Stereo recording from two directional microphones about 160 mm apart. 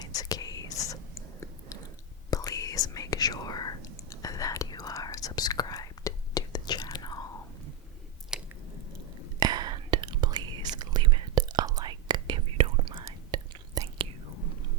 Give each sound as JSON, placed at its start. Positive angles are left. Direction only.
{"t": 0.2, "sound": "whispering", "side_deg": 25}
{"t": 8.3, "sound": "chewing", "side_deg": -5}
{"t": 9.4, "sound": "whispering", "side_deg": -25}